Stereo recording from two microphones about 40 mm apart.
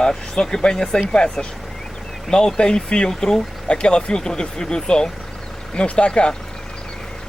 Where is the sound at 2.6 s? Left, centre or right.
Left.